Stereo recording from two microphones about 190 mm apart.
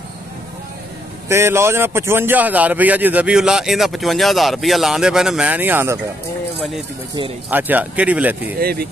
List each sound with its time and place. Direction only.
1.3 s a man's voice: 15° right (ahead or behind)
7.4 s a man's voice: 10° right (ahead or behind)
8.5 s speech: 55° right (ahead or behind)